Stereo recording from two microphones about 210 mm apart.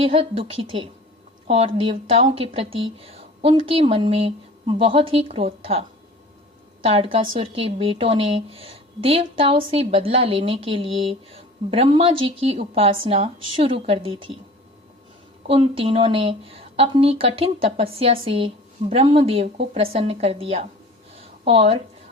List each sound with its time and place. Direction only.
0.0 s a woman's voice: 25° right (ahead or behind)
6.8 s a woman's voice: 25° right (ahead or behind)
15.4 s a woman's voice: 25° right (ahead or behind)
21.2 s a sound: 30° right (ahead or behind)